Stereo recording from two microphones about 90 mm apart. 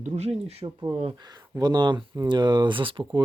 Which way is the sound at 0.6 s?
55° right (ahead or behind).